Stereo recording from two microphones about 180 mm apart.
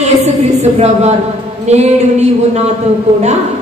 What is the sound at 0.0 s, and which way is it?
Music, 35° right (ahead or behind).